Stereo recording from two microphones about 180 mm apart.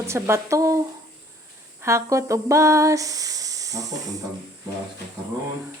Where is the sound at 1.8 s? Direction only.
15° right (ahead or behind).